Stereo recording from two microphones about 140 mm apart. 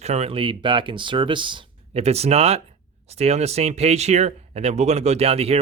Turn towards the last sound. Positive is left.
turn(degrees=-45)  # may be behind; listen again after turning